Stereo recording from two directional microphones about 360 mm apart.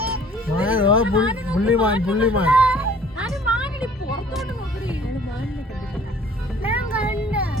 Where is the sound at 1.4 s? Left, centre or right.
Centre.